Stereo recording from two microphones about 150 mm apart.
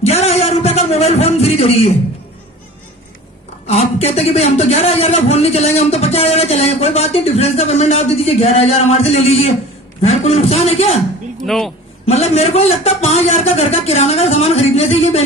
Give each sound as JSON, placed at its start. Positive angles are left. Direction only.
{"t": 0.0, "sound": "a sound", "side_deg": 45}
{"t": 3.6, "sound": "a man's voice", "side_deg": 45}
{"t": 11.4, "sound": "a man's voice", "side_deg": 0}
{"t": 12.1, "sound": "a man's voice", "side_deg": 45}